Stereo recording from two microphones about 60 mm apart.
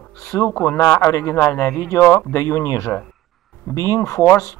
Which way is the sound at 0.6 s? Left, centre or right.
Left.